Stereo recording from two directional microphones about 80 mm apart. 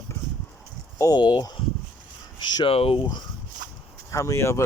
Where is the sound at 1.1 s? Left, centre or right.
Left.